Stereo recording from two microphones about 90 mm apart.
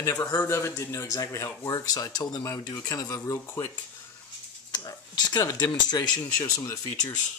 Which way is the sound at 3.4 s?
30° left (ahead or behind).